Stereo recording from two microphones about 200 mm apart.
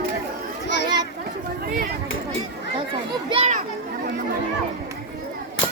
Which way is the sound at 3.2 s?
30° right (ahead or behind).